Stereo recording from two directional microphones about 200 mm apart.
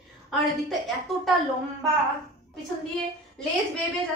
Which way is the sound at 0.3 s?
Centre (ahead or behind).